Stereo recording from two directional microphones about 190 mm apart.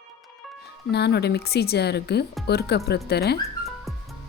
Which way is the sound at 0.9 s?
60° left (ahead or behind).